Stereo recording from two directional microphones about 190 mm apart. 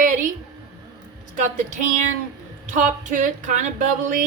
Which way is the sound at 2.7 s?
45° right (ahead or behind).